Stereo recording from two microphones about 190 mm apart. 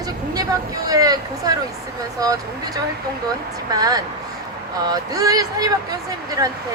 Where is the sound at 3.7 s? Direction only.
20° right (ahead or behind).